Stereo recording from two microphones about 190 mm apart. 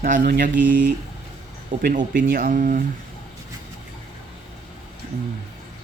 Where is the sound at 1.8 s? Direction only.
50° right (ahead or behind).